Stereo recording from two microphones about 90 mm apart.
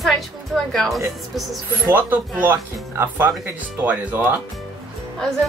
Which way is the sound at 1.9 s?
20° right (ahead or behind).